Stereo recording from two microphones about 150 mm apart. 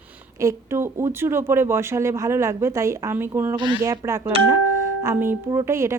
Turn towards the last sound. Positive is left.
turn(degrees=-20)  # may be behind; listen again after turning